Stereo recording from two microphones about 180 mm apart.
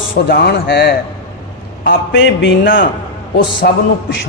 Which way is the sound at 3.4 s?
75° left (ahead or behind).